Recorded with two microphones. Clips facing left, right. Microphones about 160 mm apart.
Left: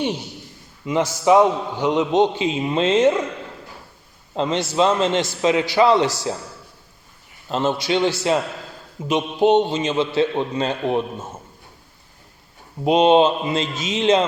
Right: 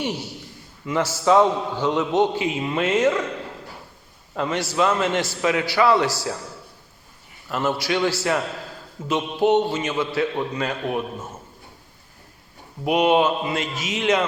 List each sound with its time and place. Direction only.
0.0 s a man's voice: 20° left (ahead or behind)
4.4 s a man's voice: 20° left (ahead or behind)
7.5 s a man's voice: 20° left (ahead or behind)
12.8 s a man's voice: 25° left (ahead or behind)